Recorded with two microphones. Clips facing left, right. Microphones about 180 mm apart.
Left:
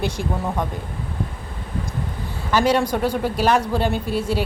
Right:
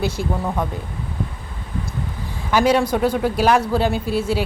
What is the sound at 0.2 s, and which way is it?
Speech, 50° left (ahead or behind).